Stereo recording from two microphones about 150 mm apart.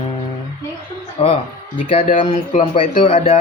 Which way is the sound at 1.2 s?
40° left (ahead or behind).